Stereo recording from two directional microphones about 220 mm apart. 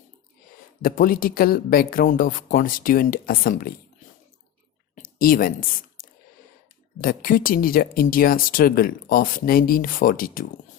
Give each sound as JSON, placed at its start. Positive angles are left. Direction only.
{"t": 0.8, "sound": "speech", "side_deg": 40}
{"t": 4.9, "sound": "a sound", "side_deg": 40}
{"t": 7.0, "sound": "speech", "side_deg": 40}